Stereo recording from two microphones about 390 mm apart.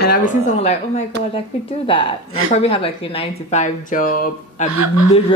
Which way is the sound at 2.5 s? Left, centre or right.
Centre.